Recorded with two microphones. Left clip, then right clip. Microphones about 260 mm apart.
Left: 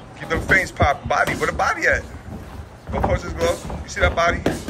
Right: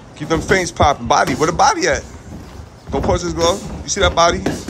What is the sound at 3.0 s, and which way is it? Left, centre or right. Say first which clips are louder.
Speech: right 5 dB; right.